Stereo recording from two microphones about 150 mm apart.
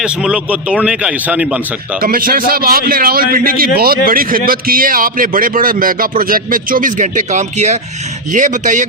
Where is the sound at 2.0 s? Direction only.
70° right (ahead or behind).